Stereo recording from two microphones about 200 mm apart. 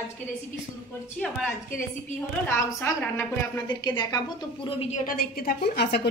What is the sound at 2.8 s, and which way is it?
A woman's voice, 10° left (ahead or behind).